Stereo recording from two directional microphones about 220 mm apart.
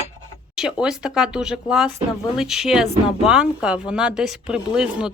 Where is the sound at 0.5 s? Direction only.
5° right (ahead or behind).